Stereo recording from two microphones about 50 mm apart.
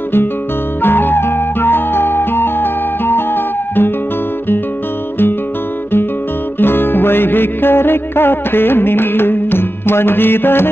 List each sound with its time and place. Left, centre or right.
0.8 s music: left
6.6 s music: left